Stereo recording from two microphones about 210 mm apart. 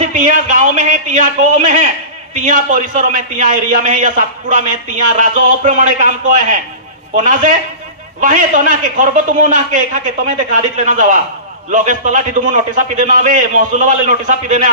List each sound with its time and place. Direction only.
0.0 s a man's voice: 40° right (ahead or behind)